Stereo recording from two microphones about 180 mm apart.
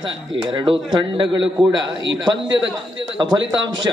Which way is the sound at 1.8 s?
90° right.